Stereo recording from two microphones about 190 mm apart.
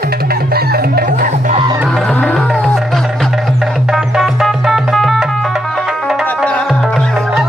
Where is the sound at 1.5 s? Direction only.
25° right (ahead or behind).